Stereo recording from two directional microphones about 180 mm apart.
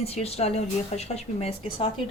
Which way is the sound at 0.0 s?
35° left (ahead or behind).